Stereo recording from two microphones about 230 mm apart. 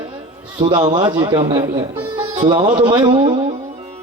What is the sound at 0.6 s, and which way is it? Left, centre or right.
A man's voice, centre.